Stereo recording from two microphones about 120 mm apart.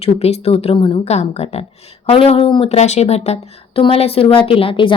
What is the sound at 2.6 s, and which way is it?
A woman's voice, 70° left (ahead or behind).